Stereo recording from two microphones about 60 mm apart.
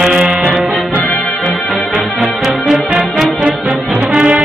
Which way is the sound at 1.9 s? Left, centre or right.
Centre.